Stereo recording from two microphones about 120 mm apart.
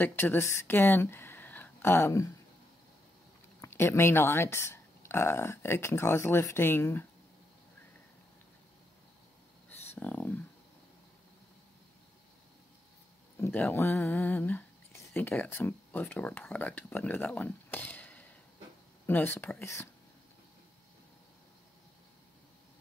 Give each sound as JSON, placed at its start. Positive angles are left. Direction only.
{"t": 0.0, "sound": "speech", "side_deg": 15}
{"t": 3.6, "sound": "speech", "side_deg": 20}
{"t": 9.7, "sound": "a sound", "side_deg": 15}
{"t": 13.4, "sound": "speech", "side_deg": 15}